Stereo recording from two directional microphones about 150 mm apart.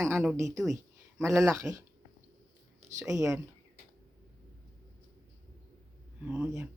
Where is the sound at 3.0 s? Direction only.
20° right (ahead or behind).